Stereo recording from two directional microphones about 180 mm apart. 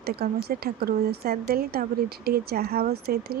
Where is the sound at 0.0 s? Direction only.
60° right (ahead or behind).